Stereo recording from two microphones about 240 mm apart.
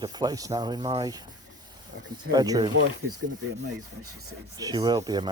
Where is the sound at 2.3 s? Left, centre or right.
Centre.